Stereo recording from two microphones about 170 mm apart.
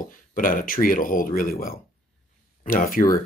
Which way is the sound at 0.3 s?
55° left (ahead or behind).